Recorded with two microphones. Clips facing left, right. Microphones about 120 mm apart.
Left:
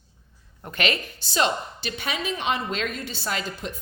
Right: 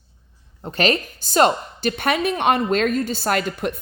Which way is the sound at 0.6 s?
30° right (ahead or behind).